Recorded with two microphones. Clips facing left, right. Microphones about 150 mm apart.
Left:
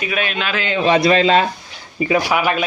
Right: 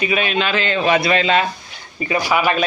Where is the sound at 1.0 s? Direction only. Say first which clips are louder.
Left 3 dB; 35° left (ahead or behind).